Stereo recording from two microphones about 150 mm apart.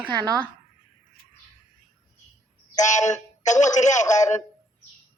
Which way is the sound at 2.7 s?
50° left (ahead or behind).